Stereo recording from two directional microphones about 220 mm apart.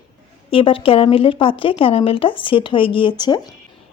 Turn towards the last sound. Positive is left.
turn(degrees=20)  # may be behind; listen again after turning